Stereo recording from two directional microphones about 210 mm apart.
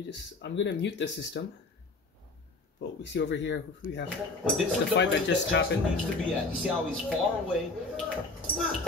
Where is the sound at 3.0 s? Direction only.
55° left (ahead or behind).